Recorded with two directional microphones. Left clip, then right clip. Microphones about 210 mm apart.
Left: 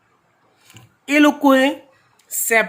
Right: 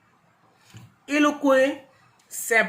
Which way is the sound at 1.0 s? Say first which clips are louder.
Left 6 dB; 55° left (ahead or behind).